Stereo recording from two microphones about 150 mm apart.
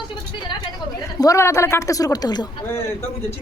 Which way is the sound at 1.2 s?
20° left (ahead or behind).